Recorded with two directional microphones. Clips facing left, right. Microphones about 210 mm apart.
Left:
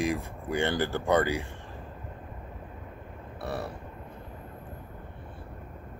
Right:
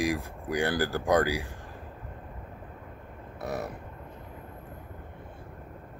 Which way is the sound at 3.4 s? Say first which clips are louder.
Right 1 dB; 20° right (ahead or behind).